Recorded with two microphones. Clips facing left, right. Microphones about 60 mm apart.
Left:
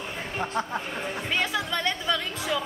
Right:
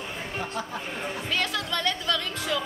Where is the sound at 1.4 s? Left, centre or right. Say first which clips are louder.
Left 2 dB; centre.